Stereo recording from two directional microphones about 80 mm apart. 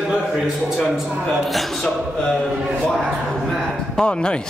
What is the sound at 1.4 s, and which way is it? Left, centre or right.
A man's voice, centre.